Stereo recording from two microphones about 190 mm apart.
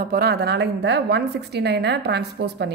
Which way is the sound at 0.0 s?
55° right (ahead or behind).